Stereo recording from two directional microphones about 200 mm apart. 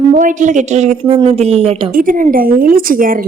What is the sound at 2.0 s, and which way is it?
A woman's voice, 40° right (ahead or behind).